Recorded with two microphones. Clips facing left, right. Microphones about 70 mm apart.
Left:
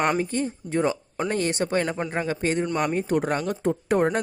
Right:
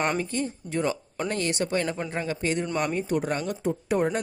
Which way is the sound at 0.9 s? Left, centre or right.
Centre.